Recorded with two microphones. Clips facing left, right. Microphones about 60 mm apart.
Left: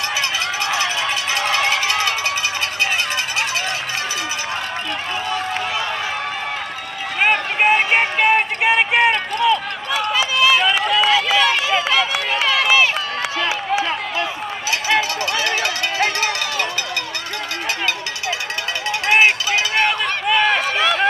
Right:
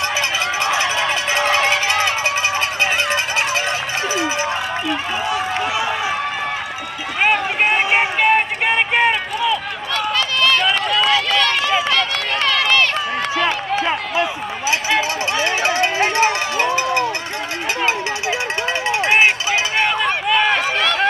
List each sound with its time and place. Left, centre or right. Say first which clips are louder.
1.3 s music: right 2 dB; right
7.2 s a sound: right 1 dB; centre
10.1 s run: left 2 dB; centre
13.8 s run: right 3 dB; centre
18.9 s run: even; right
19.8 s run: right 1 dB; centre